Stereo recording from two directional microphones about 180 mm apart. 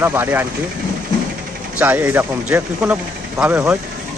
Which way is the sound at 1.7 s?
10° right (ahead or behind).